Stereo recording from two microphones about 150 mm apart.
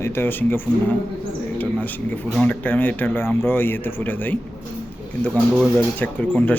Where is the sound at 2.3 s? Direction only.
10° left (ahead or behind).